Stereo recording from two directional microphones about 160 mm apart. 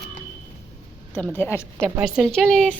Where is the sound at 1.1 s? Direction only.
10° left (ahead or behind).